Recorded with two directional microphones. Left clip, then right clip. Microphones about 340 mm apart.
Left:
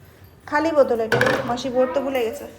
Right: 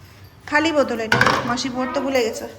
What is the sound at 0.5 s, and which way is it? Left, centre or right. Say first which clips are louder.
Speech: left 1 dB; centre.